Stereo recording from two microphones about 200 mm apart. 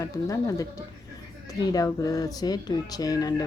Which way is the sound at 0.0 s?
15° left (ahead or behind).